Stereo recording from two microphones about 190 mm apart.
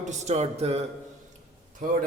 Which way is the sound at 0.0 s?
35° right (ahead or behind).